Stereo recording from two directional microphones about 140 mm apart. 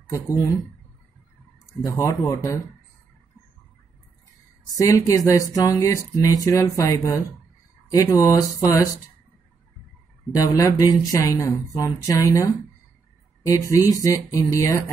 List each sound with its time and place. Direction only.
0.0 s speech: 25° left (ahead or behind)
1.9 s speech: 20° left (ahead or behind)
4.7 s speech: 25° left (ahead or behind)
10.3 s speech: 25° left (ahead or behind)
13.6 s speech: 25° left (ahead or behind)